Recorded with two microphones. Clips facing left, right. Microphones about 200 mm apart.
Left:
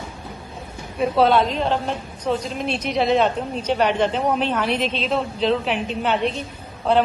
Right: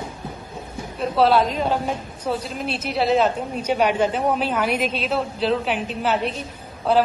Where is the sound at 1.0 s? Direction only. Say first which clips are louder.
Left 1 dB; 5° right (ahead or behind).